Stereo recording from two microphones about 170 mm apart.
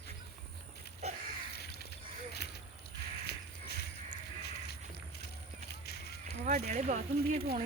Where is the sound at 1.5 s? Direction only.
75° left (ahead or behind).